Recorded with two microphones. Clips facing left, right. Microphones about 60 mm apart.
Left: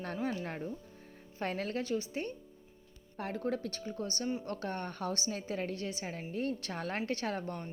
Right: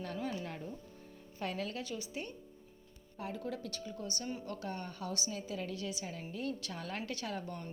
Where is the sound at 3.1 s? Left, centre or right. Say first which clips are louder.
Left 5 dB; left.